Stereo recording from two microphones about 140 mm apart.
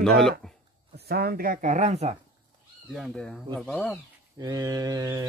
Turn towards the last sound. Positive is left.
turn(degrees=-25)  # may be behind; listen again after turning